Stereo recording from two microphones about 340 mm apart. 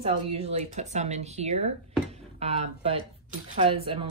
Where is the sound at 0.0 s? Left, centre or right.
Centre.